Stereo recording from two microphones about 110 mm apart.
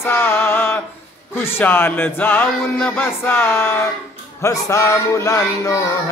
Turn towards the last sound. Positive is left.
turn(degrees=30)  # may be behind; listen again after turning